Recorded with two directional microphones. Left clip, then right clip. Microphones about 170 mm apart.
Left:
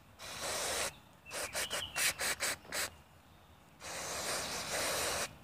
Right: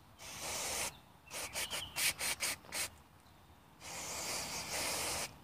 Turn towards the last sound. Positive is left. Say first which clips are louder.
# left 3 dB
turn(degrees=0)  # may be behind; listen again after turning